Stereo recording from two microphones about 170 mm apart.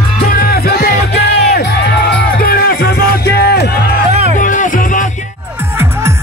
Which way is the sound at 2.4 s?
60° left (ahead or behind).